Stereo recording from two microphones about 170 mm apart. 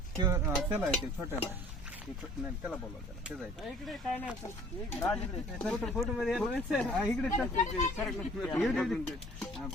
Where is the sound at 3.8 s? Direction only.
Centre (ahead or behind).